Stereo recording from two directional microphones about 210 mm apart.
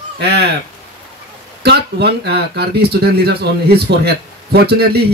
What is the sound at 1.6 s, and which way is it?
Speech, 50° right (ahead or behind).